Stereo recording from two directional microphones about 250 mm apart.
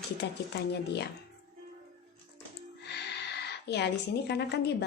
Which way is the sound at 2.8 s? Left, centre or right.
Left.